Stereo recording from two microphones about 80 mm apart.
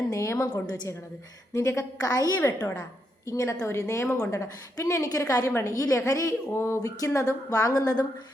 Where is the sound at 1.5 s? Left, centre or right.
Left.